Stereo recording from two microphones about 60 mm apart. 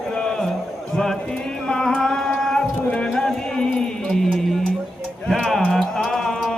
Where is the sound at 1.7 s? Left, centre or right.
Centre.